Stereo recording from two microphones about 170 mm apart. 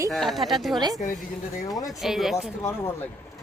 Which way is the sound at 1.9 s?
Centre (ahead or behind).